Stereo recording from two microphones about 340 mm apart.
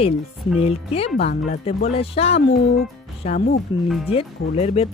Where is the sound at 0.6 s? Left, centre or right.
Centre.